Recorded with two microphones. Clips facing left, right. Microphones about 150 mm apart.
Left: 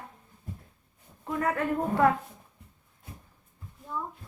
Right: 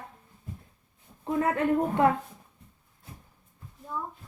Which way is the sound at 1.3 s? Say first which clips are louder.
Right 3 dB; 25° right (ahead or behind).